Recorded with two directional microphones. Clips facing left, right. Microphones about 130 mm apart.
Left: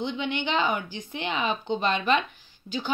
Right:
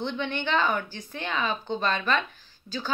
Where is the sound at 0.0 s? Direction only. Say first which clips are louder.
Left 1 dB; 15° left (ahead or behind).